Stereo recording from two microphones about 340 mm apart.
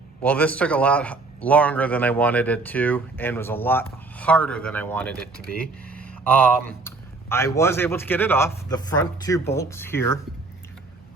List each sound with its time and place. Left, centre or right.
0.2 s speech: centre
5.5 s a sound: centre
6.2 s a man's voice: centre